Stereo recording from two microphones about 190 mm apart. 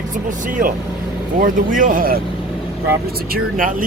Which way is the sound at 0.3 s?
45° right (ahead or behind).